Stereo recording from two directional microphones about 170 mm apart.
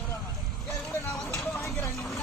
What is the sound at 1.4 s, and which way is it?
Chopping, 5° left (ahead or behind).